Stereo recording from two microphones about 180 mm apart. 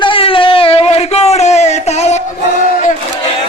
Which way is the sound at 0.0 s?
30° left (ahead or behind).